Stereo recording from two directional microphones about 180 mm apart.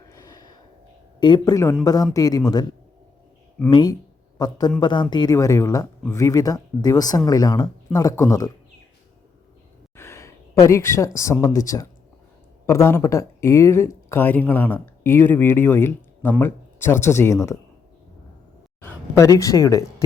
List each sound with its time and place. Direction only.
0.1 s gasp: 20° left (ahead or behind)
1.2 s speech: 25° left (ahead or behind)
3.7 s a man's voice: 25° left (ahead or behind)
9.9 s speech: 15° left (ahead or behind)
18.8 s speech: 15° left (ahead or behind)